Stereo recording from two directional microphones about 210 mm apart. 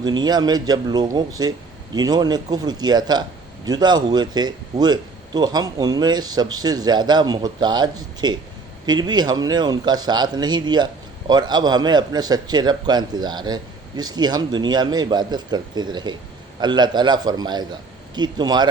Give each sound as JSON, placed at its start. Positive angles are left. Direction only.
{"t": 0.0, "sound": "speech", "side_deg": -20}